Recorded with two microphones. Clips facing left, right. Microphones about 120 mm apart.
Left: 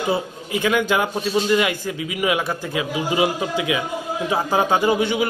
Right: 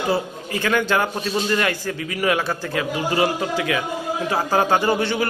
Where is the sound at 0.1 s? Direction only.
15° left (ahead or behind).